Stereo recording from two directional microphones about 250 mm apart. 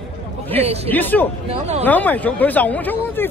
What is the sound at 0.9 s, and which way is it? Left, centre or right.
Speech, centre.